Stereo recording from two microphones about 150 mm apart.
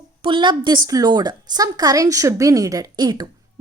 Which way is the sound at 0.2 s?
35° right (ahead or behind).